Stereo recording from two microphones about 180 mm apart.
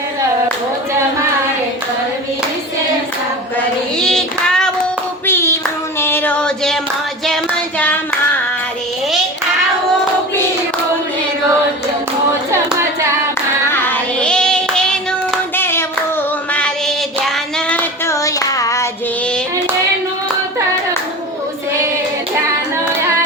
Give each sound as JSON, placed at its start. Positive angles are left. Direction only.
{"t": 3.9, "sound": "child singing", "side_deg": 5}
{"t": 5.2, "sound": "clapping", "side_deg": 15}
{"t": 6.0, "sound": "a sound", "side_deg": 10}
{"t": 13.7, "sound": "child singing", "side_deg": 10}
{"t": 16.5, "sound": "music", "side_deg": 5}
{"t": 17.7, "sound": "child singing", "side_deg": 10}